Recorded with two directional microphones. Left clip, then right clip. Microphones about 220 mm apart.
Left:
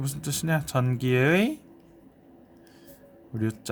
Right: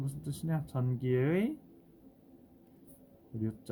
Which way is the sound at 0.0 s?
40° left (ahead or behind).